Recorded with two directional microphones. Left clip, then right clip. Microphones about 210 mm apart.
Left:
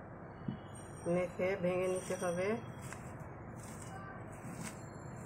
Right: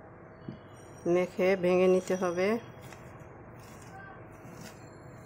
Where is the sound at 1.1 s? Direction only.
50° right (ahead or behind).